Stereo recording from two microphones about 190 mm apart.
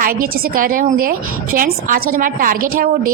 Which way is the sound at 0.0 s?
45° right (ahead or behind).